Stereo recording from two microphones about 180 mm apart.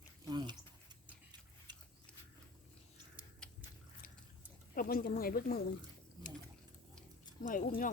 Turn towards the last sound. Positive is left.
turn(degrees=50)  # may be behind; listen again after turning